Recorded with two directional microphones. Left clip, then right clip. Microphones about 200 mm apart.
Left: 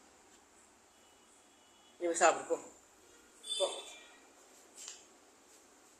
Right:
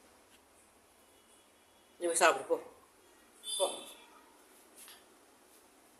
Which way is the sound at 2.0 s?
15° right (ahead or behind).